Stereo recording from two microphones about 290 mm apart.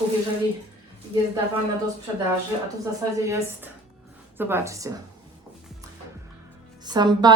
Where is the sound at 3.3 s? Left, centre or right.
Centre.